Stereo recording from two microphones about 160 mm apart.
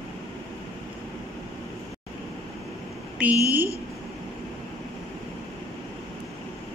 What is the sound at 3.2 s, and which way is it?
Speech, 10° right (ahead or behind).